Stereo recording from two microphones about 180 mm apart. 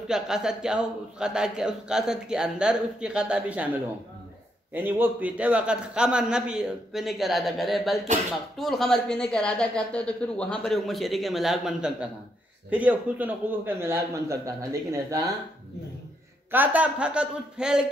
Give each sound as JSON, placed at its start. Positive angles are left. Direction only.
{"t": 0.1, "sound": "a man's voice", "side_deg": -5}
{"t": 4.7, "sound": "a man's voice", "side_deg": -10}
{"t": 16.5, "sound": "a man's voice", "side_deg": -10}